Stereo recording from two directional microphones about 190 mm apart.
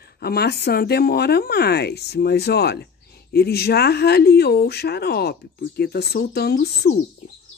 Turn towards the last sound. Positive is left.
turn(degrees=55)  # may be behind; listen again after turning